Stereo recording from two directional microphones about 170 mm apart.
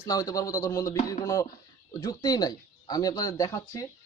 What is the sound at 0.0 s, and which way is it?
Speech, 20° left (ahead or behind).